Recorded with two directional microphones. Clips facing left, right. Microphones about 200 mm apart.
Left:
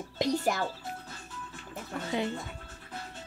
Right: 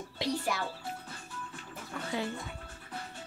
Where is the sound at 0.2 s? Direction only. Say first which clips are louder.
Left 5 dB; 45° left (ahead or behind).